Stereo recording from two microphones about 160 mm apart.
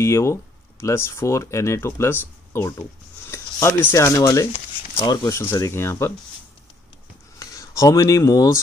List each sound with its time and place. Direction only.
0.0 s speech: 15° left (ahead or behind)
7.3 s speech: 20° left (ahead or behind)